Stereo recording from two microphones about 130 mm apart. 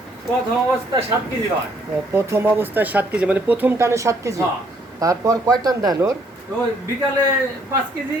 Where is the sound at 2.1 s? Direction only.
20° right (ahead or behind).